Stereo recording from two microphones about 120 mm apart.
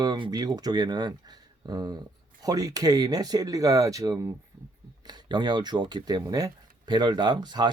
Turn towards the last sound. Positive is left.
turn(degrees=-40)  # may be behind; listen again after turning